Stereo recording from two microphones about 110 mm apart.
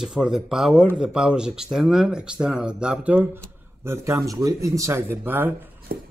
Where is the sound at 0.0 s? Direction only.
5° right (ahead or behind).